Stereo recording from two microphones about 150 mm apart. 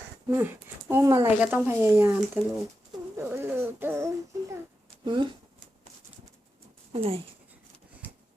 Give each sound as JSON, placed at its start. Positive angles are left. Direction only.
{"t": 0.3, "sound": "speech", "side_deg": -15}
{"t": 3.2, "sound": "a sound", "side_deg": -15}
{"t": 5.0, "sound": "speech", "side_deg": -30}
{"t": 6.9, "sound": "speech", "side_deg": -40}